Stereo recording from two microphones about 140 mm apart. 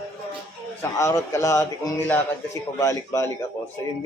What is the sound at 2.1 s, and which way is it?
Speech, 10° left (ahead or behind).